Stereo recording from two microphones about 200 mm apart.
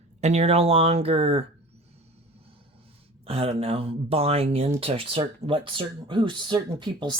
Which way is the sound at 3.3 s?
30° right (ahead or behind).